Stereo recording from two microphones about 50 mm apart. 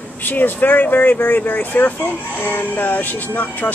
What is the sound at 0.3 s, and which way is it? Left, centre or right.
Speech, left.